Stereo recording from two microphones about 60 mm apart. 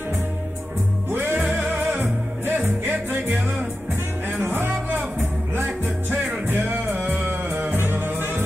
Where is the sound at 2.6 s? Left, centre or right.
Right.